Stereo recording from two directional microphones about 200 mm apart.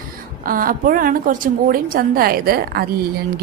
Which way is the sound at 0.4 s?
45° right (ahead or behind).